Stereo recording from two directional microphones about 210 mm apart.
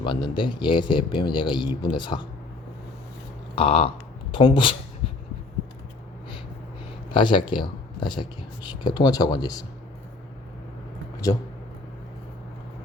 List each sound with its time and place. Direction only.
0.0 s speech: 25° left (ahead or behind)
3.5 s speech: 25° left (ahead or behind)
7.1 s speech: 20° left (ahead or behind)